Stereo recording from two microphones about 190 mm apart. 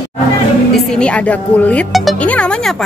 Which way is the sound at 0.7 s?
5° left (ahead or behind).